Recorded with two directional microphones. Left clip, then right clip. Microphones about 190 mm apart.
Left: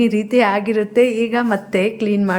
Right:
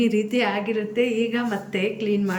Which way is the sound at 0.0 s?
20° left (ahead or behind).